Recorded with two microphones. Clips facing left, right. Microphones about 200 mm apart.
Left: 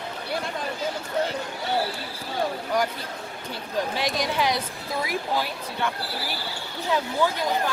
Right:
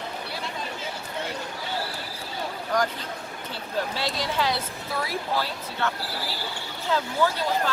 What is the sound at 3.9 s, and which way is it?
Speech, 15° left (ahead or behind).